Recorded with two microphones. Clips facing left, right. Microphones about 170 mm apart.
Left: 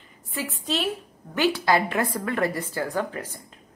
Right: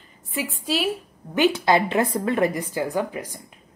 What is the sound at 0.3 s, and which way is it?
A woman's voice, 10° right (ahead or behind).